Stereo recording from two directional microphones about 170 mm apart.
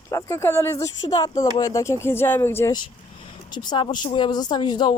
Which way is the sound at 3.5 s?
25° left (ahead or behind).